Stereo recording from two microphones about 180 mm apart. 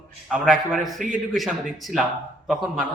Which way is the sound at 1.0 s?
45° right (ahead or behind).